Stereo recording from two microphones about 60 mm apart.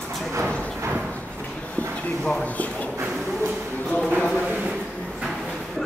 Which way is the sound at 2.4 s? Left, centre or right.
Left.